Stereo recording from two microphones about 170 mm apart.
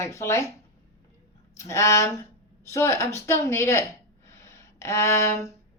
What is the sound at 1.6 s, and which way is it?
Speech, 15° left (ahead or behind).